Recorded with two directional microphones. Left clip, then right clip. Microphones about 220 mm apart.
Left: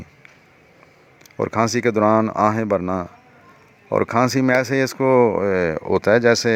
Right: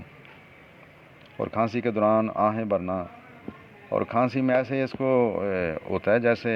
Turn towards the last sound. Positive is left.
turn(degrees=35)  # may be behind; listen again after turning